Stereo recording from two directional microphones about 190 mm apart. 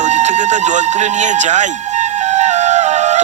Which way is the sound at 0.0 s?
40° right (ahead or behind).